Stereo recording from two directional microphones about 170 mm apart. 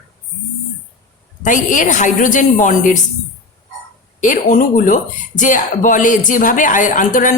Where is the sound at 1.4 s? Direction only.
50° left (ahead or behind).